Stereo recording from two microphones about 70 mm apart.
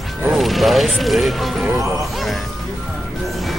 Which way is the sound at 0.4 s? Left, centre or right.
Centre.